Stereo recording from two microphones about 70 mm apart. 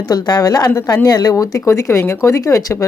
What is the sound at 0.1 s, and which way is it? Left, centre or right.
Speech, left.